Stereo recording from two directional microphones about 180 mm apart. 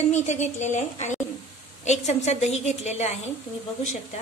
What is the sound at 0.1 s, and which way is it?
A woman's voice, 40° left (ahead or behind).